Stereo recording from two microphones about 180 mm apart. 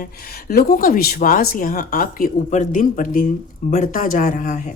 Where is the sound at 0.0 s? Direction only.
55° left (ahead or behind).